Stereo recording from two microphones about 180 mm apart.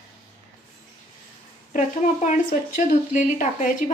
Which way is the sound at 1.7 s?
45° left (ahead or behind).